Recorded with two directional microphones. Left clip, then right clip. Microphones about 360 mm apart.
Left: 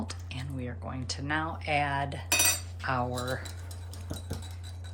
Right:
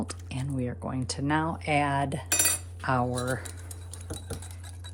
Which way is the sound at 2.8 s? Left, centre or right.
Centre.